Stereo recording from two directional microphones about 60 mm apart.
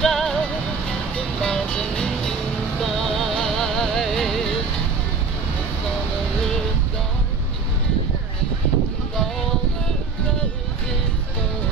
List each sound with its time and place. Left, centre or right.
0.0 s music: centre